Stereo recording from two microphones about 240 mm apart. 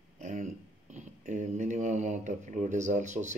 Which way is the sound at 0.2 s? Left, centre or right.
Right.